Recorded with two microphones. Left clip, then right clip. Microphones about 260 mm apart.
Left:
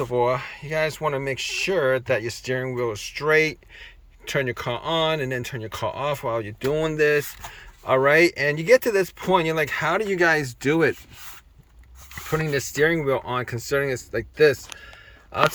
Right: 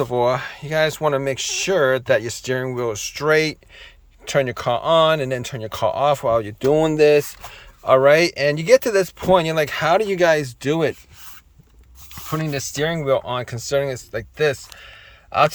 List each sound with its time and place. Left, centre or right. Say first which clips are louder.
0.0 s speech: right 3 dB; right
0.9 s speech: right 5 dB; centre
12.4 s speech: left 2 dB; centre